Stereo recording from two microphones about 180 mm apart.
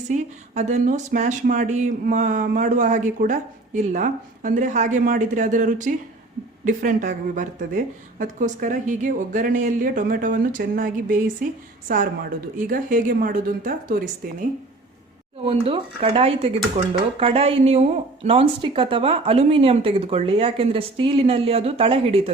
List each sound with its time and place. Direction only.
0.5 s a woman's voice: 40° right (ahead or behind)
15.4 s speech: 30° right (ahead or behind)